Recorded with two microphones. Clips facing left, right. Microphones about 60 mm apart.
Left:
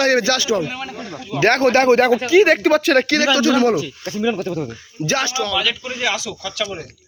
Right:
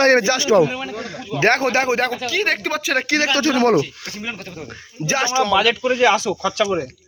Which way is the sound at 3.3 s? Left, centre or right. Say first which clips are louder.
Even; right.